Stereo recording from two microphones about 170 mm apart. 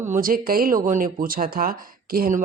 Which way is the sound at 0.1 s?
55° right (ahead or behind).